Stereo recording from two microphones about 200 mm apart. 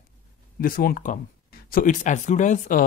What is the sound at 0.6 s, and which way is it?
Speech, 45° left (ahead or behind).